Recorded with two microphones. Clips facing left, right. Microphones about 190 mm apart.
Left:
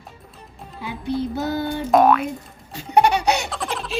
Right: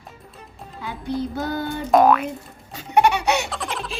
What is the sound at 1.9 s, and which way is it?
Boing, centre (ahead or behind).